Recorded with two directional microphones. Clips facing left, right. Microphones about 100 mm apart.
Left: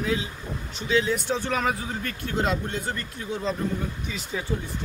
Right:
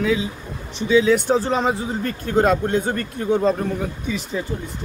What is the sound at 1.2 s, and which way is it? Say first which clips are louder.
Speech: right 7 dB; 35° right (ahead or behind).